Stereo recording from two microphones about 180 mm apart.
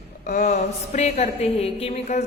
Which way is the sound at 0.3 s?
45° left (ahead or behind).